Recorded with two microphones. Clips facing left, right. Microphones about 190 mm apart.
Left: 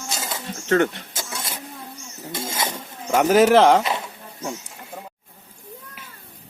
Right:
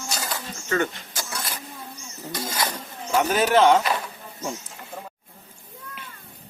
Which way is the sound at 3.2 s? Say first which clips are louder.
Left 5 dB; 90° left.